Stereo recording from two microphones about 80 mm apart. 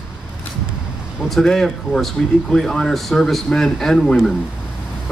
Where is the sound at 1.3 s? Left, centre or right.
Centre.